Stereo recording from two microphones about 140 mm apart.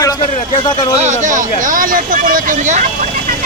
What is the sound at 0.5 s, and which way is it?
Speech, 30° left (ahead or behind).